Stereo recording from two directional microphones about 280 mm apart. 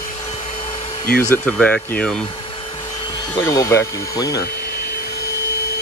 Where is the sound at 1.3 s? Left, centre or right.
Centre.